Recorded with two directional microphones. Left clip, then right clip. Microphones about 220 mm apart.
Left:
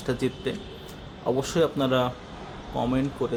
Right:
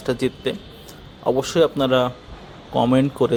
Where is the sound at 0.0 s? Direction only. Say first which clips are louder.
Right 6 dB; 35° right (ahead or behind).